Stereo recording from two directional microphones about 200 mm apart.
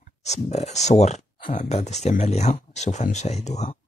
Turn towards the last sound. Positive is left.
turn(degrees=35)  # may be behind; listen again after turning